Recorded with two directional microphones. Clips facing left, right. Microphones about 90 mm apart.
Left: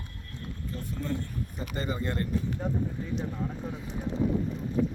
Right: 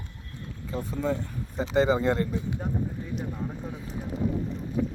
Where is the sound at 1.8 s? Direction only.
90° right.